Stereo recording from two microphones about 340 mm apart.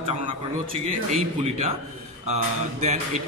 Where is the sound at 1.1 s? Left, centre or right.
Centre.